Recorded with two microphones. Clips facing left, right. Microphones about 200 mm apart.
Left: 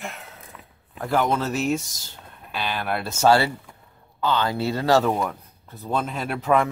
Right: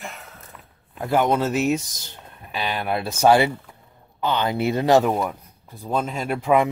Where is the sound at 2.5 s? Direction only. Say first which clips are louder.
Right 2 dB; 15° right (ahead or behind).